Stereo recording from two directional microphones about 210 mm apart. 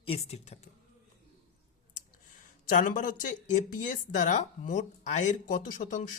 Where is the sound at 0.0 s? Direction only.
30° left (ahead or behind).